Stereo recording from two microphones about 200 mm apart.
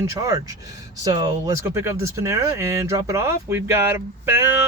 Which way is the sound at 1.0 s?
20° right (ahead or behind).